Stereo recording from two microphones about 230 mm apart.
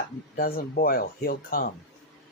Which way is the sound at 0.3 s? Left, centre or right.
Left.